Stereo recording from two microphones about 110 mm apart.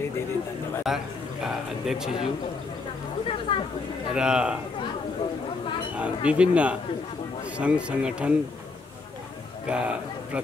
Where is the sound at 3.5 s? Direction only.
50° left (ahead or behind).